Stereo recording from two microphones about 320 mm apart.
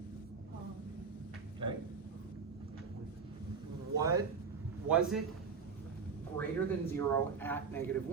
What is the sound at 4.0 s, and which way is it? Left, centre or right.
Speech, centre.